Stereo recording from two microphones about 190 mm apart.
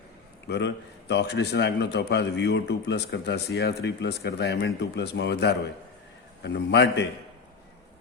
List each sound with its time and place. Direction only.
0.4 s a man's voice: 65° left (ahead or behind)